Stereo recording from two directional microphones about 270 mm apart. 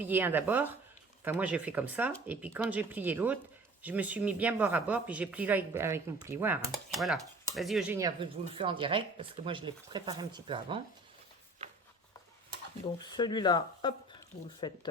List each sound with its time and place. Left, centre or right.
0.0 s speech: centre
13.1 s speech: centre